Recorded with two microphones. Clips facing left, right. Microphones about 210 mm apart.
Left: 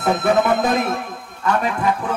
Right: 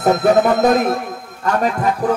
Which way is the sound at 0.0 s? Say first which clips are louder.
Right 4 dB; 40° right (ahead or behind).